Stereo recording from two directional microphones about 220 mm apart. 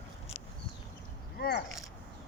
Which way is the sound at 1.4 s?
50° left (ahead or behind).